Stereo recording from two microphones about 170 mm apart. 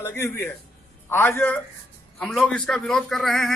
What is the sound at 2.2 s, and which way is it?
A man's voice, centre (ahead or behind).